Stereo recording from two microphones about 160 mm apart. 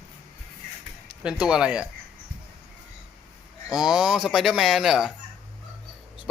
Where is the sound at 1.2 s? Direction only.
5° right (ahead or behind).